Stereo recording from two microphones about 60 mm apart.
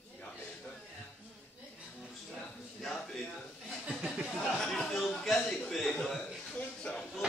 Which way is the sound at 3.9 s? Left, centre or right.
Centre.